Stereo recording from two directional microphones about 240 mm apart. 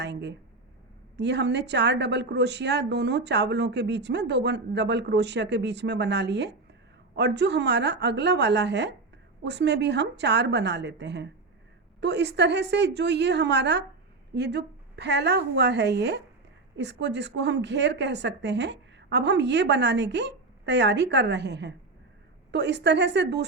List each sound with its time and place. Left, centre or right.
0.0 s speech: right